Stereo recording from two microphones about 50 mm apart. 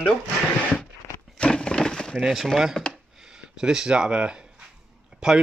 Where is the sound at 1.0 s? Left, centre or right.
Left.